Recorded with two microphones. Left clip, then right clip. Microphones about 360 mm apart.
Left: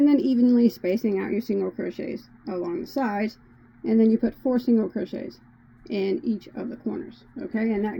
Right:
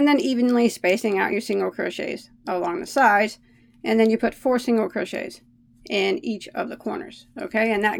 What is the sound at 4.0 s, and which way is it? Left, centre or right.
Speech, right.